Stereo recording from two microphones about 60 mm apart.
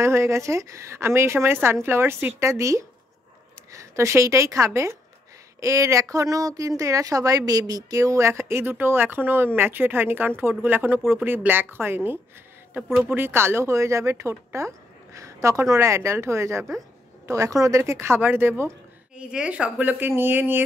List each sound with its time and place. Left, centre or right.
0.0 s a woman's voice: right
17.3 s a woman's voice: right
18.2 s speech: right
19.1 s a woman's voice: centre
19.8 s speech: right